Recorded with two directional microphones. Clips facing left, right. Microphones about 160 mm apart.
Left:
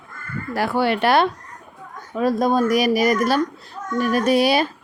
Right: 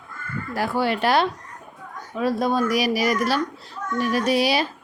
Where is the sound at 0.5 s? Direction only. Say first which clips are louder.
Left 3 dB; 65° left (ahead or behind).